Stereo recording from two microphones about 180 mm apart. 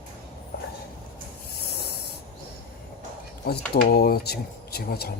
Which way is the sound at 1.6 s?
65° left (ahead or behind).